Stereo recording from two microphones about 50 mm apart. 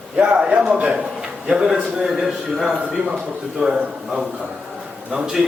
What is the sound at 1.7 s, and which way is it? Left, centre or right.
A man's voice, centre.